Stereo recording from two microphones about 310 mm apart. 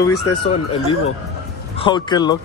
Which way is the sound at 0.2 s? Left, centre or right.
Centre.